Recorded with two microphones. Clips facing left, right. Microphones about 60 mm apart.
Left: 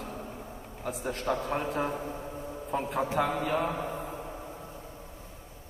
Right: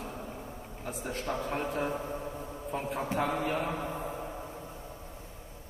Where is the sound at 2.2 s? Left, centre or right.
Centre.